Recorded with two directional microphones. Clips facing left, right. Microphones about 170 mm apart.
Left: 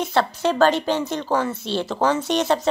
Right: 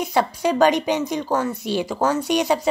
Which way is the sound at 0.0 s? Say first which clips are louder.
Even; 10° right (ahead or behind).